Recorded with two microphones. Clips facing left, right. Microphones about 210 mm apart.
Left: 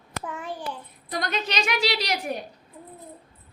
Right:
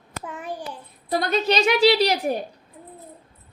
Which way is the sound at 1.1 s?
30° right (ahead or behind).